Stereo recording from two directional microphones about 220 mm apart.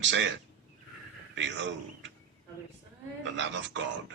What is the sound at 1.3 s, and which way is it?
Speech, 55° right (ahead or behind).